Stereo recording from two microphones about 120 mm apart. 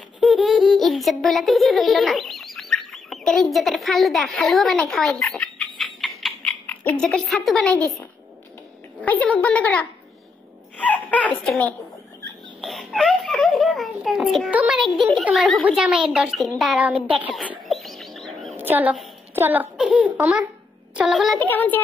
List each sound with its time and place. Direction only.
0.2 s a sound: centre (ahead or behind)
5.8 s clock: centre (ahead or behind)
6.6 s a woman's voice: 15° left (ahead or behind)
9.0 s a woman's voice: 15° left (ahead or behind)
10.8 s a sound: 10° left (ahead or behind)
12.6 s a sound: centre (ahead or behind)
14.5 s a woman's voice: 10° right (ahead or behind)
17.6 s chirp: centre (ahead or behind)
18.6 s a woman's voice: 15° right (ahead or behind)
21.4 s a woman's voice: 15° left (ahead or behind)